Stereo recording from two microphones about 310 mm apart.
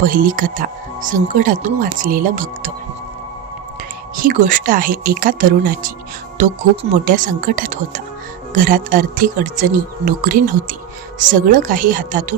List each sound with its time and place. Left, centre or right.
0.0 s speech: right
4.2 s speech: right
7.0 s speech: right